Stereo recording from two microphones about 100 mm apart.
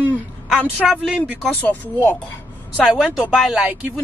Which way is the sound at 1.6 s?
20° left (ahead or behind).